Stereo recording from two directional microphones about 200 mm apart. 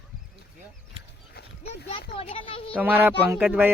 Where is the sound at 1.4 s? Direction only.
55° left (ahead or behind).